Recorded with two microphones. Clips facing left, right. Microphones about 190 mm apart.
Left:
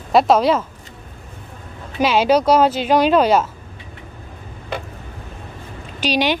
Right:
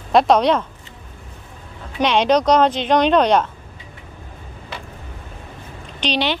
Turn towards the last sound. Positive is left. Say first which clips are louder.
# left 2 dB
turn(degrees=10)  # may be behind; listen again after turning